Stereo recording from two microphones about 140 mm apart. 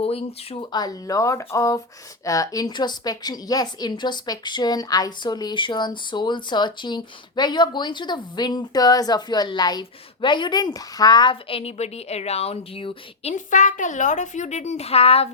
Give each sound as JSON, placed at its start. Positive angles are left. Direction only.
{"t": 0.0, "sound": "speech", "side_deg": 45}
{"t": 0.7, "sound": "a woman's voice", "side_deg": 30}
{"t": 13.3, "sound": "speech", "side_deg": 65}